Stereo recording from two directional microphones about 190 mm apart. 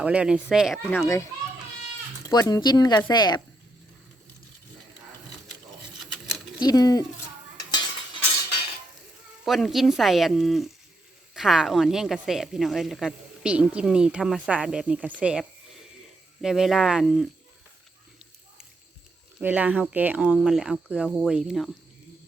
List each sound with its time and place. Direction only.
0.0 s speech: 5° right (ahead or behind)
0.9 s a child's voice: 15° left (ahead or behind)
6.0 s patter: centre (ahead or behind)
6.6 s speech: 20° left (ahead or behind)
7.5 s cutlery: 20° left (ahead or behind)
9.4 s speech: centre (ahead or behind)
19.4 s speech: 10° right (ahead or behind)